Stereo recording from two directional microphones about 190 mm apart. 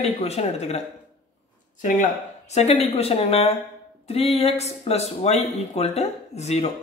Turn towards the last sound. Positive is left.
turn(degrees=35)  # may be behind; listen again after turning